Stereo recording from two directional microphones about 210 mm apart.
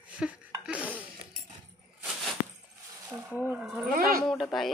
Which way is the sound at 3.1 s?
20° right (ahead or behind).